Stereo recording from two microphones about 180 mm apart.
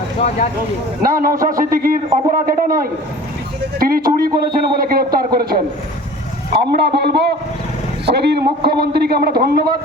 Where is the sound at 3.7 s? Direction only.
55° right (ahead or behind).